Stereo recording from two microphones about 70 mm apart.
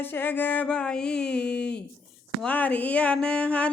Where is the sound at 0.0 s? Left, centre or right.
Left.